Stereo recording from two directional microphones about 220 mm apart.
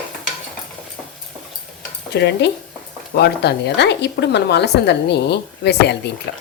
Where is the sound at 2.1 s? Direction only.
50° left (ahead or behind).